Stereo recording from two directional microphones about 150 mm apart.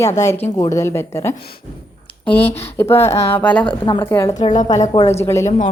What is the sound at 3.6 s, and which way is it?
Speech, 35° left (ahead or behind).